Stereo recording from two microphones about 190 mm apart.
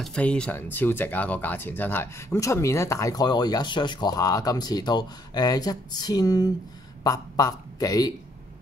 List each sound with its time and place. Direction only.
0.0 s speech: 5° left (ahead or behind)